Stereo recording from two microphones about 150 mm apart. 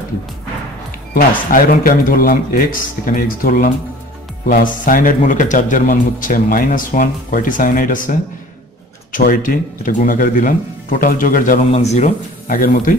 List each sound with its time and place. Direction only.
1.1 s a man's voice: 70° left (ahead or behind)
11.7 s speech: 45° left (ahead or behind)
12.4 s speech: 70° left (ahead or behind)